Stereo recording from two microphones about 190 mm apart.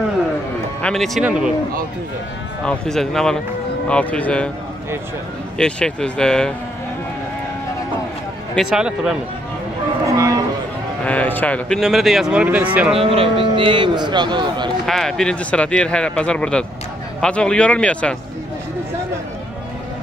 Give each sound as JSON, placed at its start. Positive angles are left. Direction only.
{"t": 0.8, "sound": "speech", "side_deg": 0}
{"t": 2.6, "sound": "speech", "side_deg": 5}
{"t": 5.6, "sound": "speech", "side_deg": 5}
{"t": 8.5, "sound": "speech", "side_deg": -5}
{"t": 10.0, "sound": "a sound", "side_deg": -15}
{"t": 11.1, "sound": "speech", "side_deg": 10}
{"t": 12.9, "sound": "a man's voice", "side_deg": -30}
{"t": 14.9, "sound": "speech", "side_deg": 0}